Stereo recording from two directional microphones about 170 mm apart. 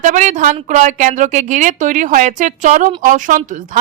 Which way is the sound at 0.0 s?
45° right (ahead or behind).